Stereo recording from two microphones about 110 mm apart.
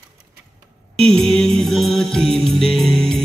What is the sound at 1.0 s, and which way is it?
Music, 5° left (ahead or behind).